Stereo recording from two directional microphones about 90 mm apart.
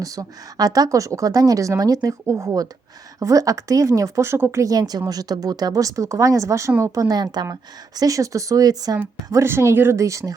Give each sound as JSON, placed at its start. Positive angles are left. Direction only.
{"t": 0.0, "sound": "speech", "side_deg": -40}
{"t": 4.6, "sound": "speech", "side_deg": -45}
{"t": 9.3, "sound": "speech", "side_deg": -30}